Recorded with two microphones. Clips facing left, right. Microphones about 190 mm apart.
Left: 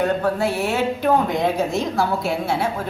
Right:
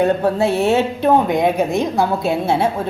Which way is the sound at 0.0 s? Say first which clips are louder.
Right 4 dB; 25° right (ahead or behind).